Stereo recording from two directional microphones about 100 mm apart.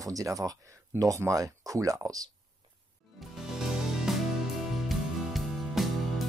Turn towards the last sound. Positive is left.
turn(degrees=0)  # may be behind; listen again after turning